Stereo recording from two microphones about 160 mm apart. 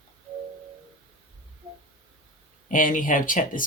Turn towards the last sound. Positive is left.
turn(degrees=55)  # may be behind; listen again after turning